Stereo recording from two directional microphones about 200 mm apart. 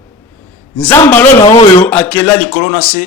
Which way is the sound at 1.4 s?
25° left (ahead or behind).